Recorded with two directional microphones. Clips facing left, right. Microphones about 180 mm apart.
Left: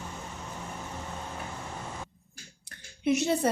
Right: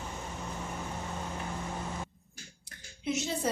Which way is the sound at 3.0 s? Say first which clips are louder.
Left 7 dB; 65° left (ahead or behind).